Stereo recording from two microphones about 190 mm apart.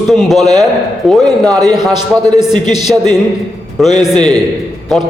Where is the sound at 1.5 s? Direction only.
20° right (ahead or behind).